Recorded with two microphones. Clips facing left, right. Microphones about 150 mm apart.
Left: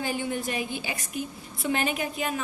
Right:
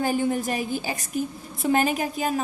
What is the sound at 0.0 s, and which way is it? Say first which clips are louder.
A woman's voice: right 6 dB; 40° right (ahead or behind).